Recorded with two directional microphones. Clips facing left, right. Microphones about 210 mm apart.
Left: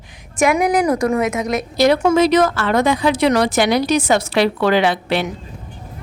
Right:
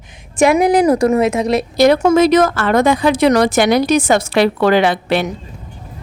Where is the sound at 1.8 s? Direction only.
45° right (ahead or behind).